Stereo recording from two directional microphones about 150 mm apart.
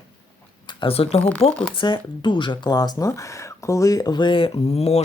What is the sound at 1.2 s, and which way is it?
Speech, 10° left (ahead or behind).